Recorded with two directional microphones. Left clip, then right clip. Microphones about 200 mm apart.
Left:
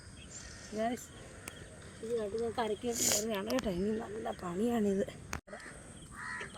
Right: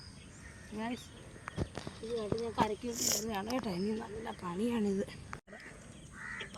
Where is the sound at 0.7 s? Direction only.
10° left (ahead or behind).